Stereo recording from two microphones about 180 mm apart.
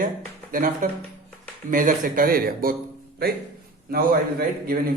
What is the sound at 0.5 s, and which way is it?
Speech, 50° right (ahead or behind).